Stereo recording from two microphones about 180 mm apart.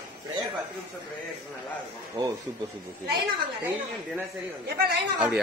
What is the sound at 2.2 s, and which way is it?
Speech, 25° right (ahead or behind).